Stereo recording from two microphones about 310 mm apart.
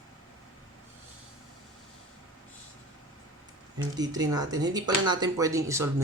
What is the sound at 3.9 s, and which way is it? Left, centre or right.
Speech, centre.